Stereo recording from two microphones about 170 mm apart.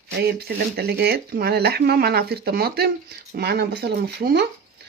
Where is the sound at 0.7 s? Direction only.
70° right (ahead or behind).